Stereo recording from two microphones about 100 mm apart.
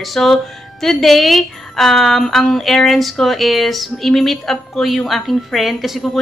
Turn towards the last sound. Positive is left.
turn(degrees=0)  # may be behind; listen again after turning